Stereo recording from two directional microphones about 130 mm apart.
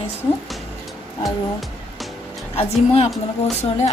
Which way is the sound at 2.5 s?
50° left (ahead or behind).